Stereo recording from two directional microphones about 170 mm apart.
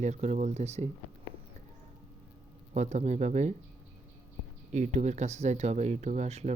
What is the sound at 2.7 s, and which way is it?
Speech, 45° right (ahead or behind).